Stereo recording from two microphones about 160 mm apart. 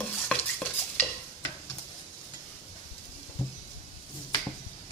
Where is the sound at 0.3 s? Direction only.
10° left (ahead or behind).